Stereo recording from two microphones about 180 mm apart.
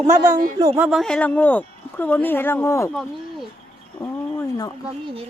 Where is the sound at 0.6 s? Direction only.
20° right (ahead or behind).